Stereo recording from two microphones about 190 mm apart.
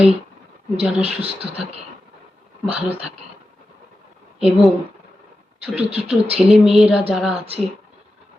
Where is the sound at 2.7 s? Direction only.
10° right (ahead or behind).